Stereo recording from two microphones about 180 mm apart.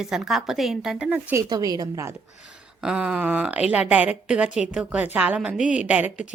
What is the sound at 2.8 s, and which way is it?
A woman's voice, 5° right (ahead or behind).